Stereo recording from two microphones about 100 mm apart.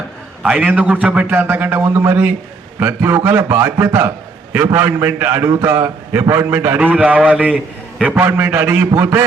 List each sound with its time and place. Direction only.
0.4 s a man's voice: 15° right (ahead or behind)